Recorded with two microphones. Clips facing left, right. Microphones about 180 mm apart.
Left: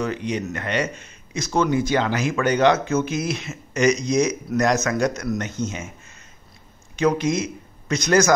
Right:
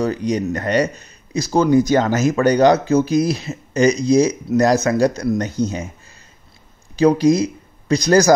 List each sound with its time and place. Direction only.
0.0 s speech: 40° right (ahead or behind)
7.0 s speech: 35° right (ahead or behind)